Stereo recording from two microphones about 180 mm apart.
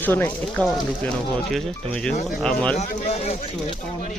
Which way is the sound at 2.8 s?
35° left (ahead or behind).